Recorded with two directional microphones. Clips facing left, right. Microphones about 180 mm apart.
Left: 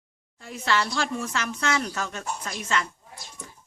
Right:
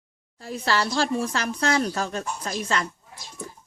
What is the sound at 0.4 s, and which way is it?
Speech, 35° right (ahead or behind).